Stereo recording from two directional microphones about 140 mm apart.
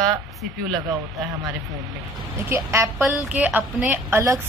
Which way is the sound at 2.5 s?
20° right (ahead or behind).